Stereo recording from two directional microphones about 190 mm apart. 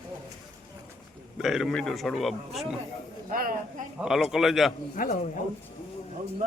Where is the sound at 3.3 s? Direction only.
50° right (ahead or behind).